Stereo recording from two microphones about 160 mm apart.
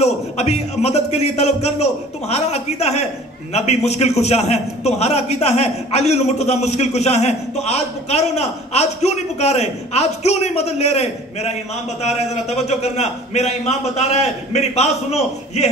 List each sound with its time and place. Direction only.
0.0 s a man's voice: 40° left (ahead or behind)